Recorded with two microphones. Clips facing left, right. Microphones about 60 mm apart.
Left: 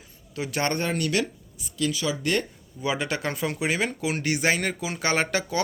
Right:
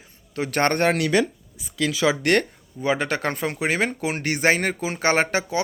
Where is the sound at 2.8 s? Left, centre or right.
Right.